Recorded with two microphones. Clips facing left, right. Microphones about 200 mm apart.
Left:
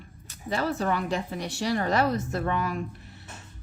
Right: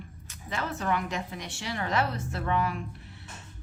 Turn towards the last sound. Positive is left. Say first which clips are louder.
# left 5 dB
turn(degrees=40)  # may be behind; listen again after turning